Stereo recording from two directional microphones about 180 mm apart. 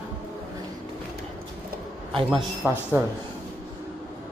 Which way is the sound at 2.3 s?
10° right (ahead or behind).